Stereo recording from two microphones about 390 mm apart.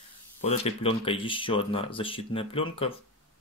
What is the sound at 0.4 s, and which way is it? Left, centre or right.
Speech, centre.